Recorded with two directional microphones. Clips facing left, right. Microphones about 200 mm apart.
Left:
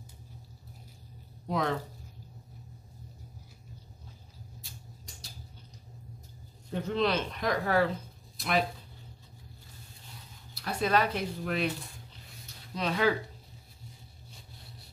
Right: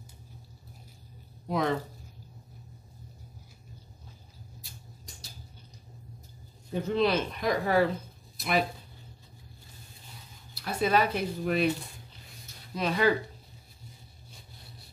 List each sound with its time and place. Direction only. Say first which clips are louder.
1.5 s speech: right 2 dB; centre (ahead or behind)
6.7 s speech: right 3 dB; 10° right (ahead or behind)
10.5 s speech: right 2 dB; 5° right (ahead or behind)
12.7 s speech: right 2 dB; 5° right (ahead or behind)